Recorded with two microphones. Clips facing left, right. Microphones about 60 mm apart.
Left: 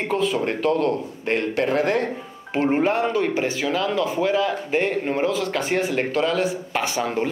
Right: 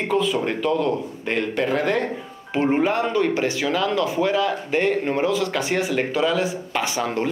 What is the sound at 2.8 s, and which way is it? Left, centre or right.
Speech, centre.